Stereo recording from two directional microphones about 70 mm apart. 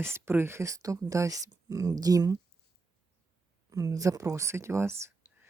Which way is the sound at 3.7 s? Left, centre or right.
Right.